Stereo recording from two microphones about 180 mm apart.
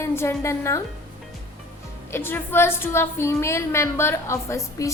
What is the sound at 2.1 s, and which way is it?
A woman's voice, 10° left (ahead or behind).